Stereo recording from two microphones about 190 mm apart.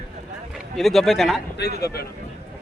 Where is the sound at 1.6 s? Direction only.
60° left (ahead or behind).